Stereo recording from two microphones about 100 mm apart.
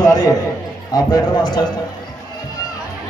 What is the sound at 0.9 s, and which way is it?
Speech, 45° left (ahead or behind).